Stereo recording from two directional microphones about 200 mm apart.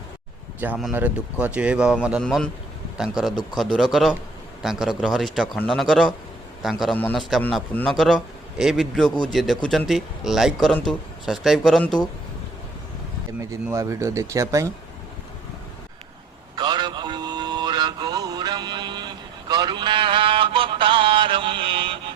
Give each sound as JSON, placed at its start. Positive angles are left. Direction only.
{"t": 0.6, "sound": "speech", "side_deg": -5}
{"t": 13.4, "sound": "speech", "side_deg": -15}
{"t": 16.6, "sound": "a sound", "side_deg": -20}